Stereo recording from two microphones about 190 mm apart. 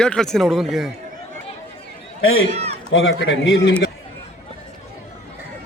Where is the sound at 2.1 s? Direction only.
90° left; by 3.7 s 75° left (ahead or behind).